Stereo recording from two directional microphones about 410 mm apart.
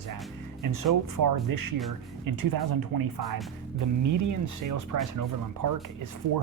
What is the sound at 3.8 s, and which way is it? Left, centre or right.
Speech, right.